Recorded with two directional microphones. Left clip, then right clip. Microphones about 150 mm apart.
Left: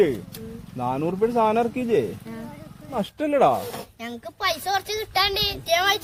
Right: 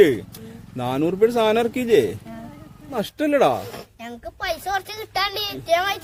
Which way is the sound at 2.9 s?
45° right (ahead or behind).